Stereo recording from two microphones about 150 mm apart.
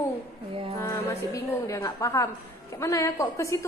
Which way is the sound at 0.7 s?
20° left (ahead or behind).